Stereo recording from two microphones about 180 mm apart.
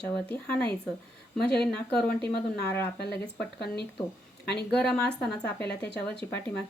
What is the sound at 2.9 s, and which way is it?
Speech, 65° left (ahead or behind).